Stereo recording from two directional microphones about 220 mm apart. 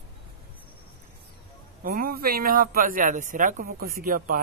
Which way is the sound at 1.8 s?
40° right (ahead or behind).